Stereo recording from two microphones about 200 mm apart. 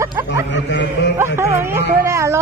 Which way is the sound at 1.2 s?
10° right (ahead or behind).